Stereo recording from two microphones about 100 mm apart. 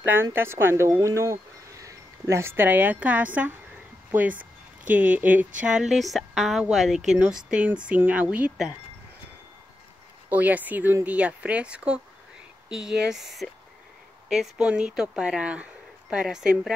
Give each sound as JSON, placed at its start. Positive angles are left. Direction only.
{"t": 0.1, "sound": "speech", "side_deg": -25}
{"t": 10.3, "sound": "speech", "side_deg": -15}